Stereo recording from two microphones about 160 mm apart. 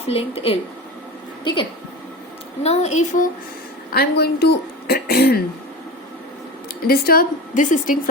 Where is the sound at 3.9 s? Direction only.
85° left.